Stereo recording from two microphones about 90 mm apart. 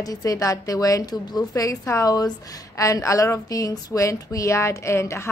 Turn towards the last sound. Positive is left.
turn(degrees=30)  # may be behind; listen again after turning